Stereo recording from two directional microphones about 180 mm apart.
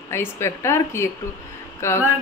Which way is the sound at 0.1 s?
15° left (ahead or behind).